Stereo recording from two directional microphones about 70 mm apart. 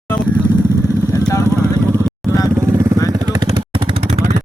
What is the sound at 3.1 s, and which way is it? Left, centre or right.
Vehicle, right.